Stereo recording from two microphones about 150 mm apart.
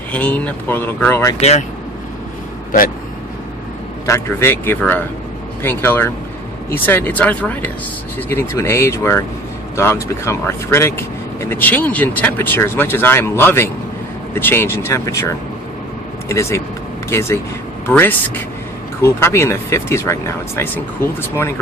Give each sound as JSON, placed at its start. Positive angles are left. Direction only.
{"t": 0.1, "sound": "speech", "side_deg": 10}
{"t": 1.4, "sound": "speech", "side_deg": 45}
{"t": 4.0, "sound": "speech", "side_deg": 20}
{"t": 16.3, "sound": "speech", "side_deg": 20}